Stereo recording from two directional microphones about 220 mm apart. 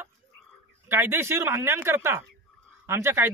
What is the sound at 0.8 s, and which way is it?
Speech, 10° right (ahead or behind).